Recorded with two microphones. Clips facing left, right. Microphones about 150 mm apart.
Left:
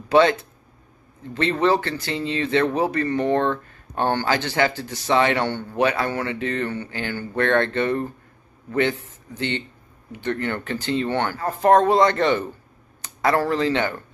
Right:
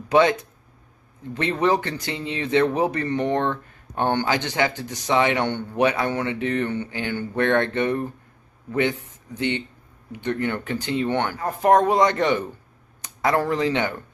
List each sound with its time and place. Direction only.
0.1 s speech: 15° right (ahead or behind)